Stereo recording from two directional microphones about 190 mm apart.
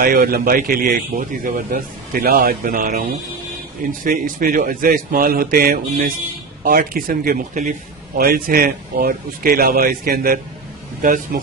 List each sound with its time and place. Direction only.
0.0 s speech: 50° right (ahead or behind)
4.0 s speech: 45° right (ahead or behind)